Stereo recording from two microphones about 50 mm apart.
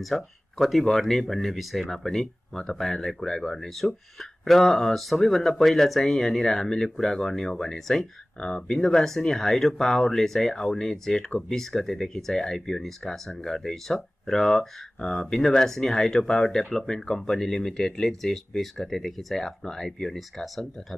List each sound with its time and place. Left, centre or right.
0.0 s speech: centre
8.4 s speech: centre